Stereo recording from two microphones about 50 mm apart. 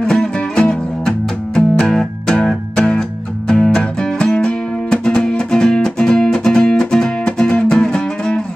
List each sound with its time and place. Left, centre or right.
0.0 s music: centre